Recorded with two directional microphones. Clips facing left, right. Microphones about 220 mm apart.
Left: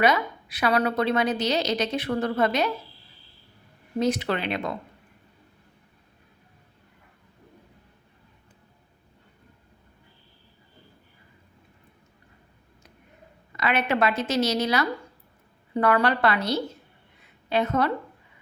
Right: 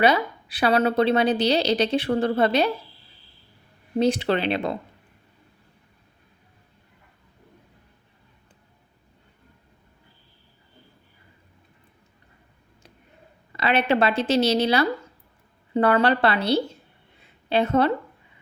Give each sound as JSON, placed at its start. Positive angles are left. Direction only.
{"t": 0.0, "sound": "a woman's voice", "side_deg": -30}
{"t": 3.9, "sound": "a woman's voice", "side_deg": -30}
{"t": 13.6, "sound": "a woman's voice", "side_deg": -30}